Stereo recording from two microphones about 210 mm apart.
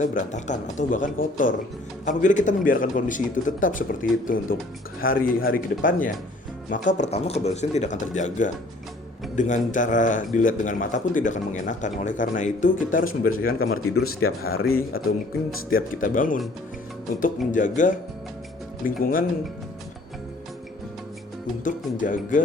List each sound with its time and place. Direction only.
0.0 s speech: 40° left (ahead or behind)
14.2 s speech: 80° left
15.7 s speech: 40° left (ahead or behind)
18.9 s speech: 45° left (ahead or behind)
21.6 s speech: 40° left (ahead or behind)